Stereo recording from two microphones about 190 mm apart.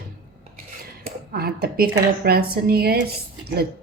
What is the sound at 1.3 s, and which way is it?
A woman's voice, 55° right (ahead or behind).